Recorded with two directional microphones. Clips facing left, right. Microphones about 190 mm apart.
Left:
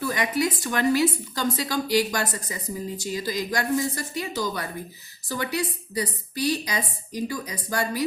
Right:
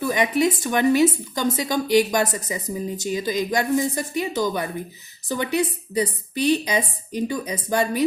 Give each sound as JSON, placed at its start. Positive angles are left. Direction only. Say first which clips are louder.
{"t": 0.0, "sound": "a woman's voice", "louder": "right 5 dB", "side_deg": -20}